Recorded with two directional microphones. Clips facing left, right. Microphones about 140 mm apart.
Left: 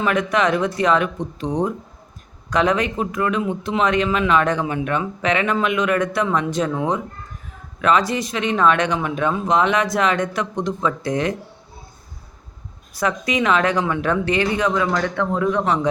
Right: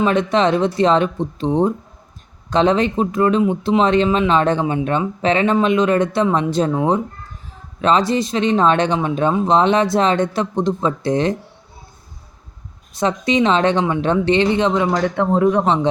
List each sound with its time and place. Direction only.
0.0 s speech: 25° right (ahead or behind)
13.0 s speech: 25° right (ahead or behind)